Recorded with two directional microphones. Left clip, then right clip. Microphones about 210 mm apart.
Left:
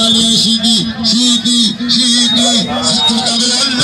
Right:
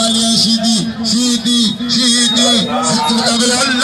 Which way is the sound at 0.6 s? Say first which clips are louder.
Left 4 dB; 30° right (ahead or behind).